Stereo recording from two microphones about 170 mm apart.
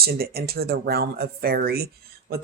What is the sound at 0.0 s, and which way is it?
Speech, 65° right (ahead or behind).